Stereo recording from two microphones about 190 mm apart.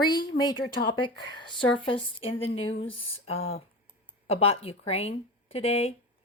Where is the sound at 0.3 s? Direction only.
25° left (ahead or behind).